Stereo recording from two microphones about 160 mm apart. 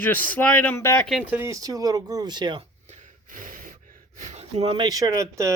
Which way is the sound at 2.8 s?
50° right (ahead or behind).